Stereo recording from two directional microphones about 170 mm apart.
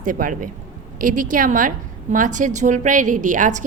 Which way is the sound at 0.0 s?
50° right (ahead or behind).